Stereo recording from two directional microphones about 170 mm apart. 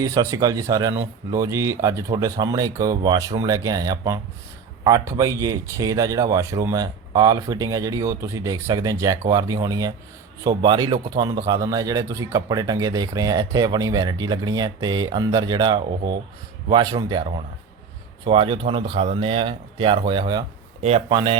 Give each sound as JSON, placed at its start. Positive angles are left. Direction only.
{"t": 0.0, "sound": "a man's voice", "side_deg": -20}
{"t": 18.3, "sound": "a man's voice", "side_deg": -30}